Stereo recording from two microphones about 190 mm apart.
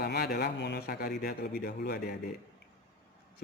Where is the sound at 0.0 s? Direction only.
60° left (ahead or behind).